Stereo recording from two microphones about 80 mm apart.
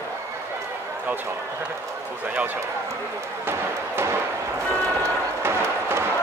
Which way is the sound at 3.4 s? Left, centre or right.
Right.